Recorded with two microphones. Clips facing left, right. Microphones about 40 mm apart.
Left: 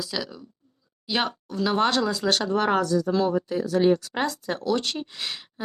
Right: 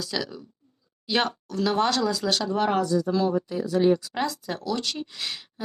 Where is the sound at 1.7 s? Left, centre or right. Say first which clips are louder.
Left 2 dB; left.